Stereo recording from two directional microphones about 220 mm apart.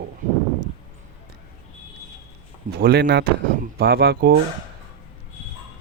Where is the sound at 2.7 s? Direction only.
45° right (ahead or behind).